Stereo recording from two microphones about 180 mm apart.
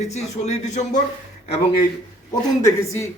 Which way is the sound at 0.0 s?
40° left (ahead or behind).